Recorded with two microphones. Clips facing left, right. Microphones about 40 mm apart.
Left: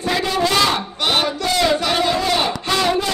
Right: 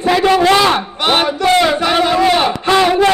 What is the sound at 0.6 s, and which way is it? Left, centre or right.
Battle cry, right.